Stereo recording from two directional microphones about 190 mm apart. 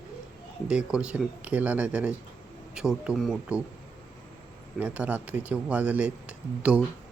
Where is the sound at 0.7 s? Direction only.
5° right (ahead or behind).